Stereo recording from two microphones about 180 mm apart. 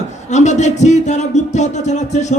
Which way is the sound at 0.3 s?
40° left (ahead or behind).